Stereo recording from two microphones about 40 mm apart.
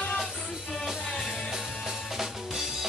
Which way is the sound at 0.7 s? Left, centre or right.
Centre.